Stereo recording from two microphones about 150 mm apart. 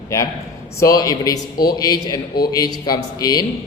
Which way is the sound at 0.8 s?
25° left (ahead or behind).